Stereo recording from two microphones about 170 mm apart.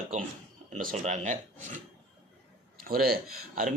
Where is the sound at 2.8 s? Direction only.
60° right (ahead or behind).